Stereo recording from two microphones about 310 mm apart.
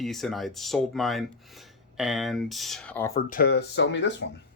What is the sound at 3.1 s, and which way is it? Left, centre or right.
Speech, left.